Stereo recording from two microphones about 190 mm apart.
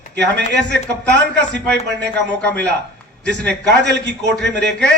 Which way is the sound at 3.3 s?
65° right (ahead or behind).